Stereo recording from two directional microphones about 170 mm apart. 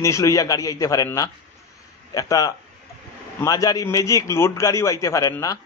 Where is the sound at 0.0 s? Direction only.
20° left (ahead or behind).